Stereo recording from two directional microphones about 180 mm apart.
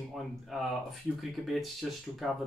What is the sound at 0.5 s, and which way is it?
Speech, centre (ahead or behind).